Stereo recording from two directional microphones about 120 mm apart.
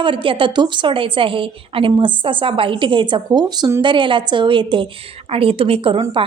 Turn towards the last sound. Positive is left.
turn(degrees=-45)  # may be behind; listen again after turning